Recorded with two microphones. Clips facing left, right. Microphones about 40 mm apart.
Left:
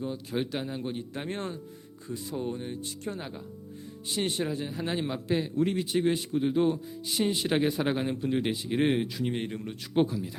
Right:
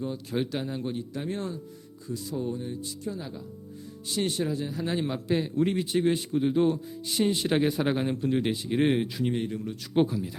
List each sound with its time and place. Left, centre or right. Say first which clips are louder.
0.0 s a man's voice: right 2 dB; centre
1.1 s speech: right 2 dB; left
4.0 s speech: right 1 dB; left
4.9 s speech: right 2 dB; centre
5.5 s speech: right 1 dB; centre
5.8 s speech: right 1 dB; centre
9.3 s speech: right 3 dB; left
9.9 s speech: right 1 dB; centre